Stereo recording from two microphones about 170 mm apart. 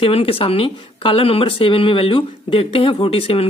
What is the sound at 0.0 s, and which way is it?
Speech, 35° left (ahead or behind).